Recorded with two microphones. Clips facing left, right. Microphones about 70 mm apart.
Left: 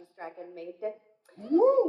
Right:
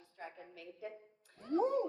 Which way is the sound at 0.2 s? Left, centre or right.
Left.